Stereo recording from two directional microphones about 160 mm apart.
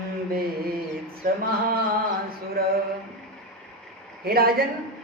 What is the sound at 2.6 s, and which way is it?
Speech, 70° right (ahead or behind).